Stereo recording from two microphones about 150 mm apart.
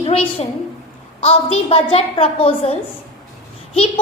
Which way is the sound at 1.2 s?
45° left (ahead or behind).